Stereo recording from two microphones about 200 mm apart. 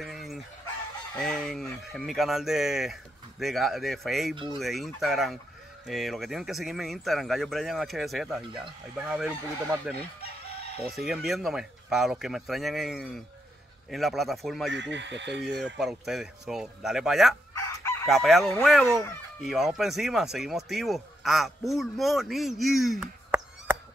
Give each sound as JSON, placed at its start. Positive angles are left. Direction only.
{"t": 0.0, "sound": "chicken", "side_deg": 0}
{"t": 1.1, "sound": "speech", "side_deg": 0}
{"t": 14.7, "sound": "speech", "side_deg": -65}
{"t": 15.6, "sound": "speech", "side_deg": 0}